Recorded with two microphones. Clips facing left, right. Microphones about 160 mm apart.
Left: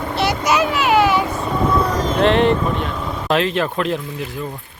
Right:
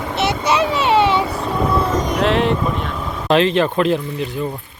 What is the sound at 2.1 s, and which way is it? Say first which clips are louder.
Speech: left 4 dB; centre (ahead or behind).